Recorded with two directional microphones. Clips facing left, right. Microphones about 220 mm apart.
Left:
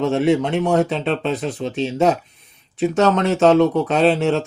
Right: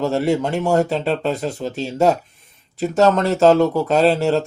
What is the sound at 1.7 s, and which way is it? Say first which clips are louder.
Speech: left 3 dB; 45° right (ahead or behind).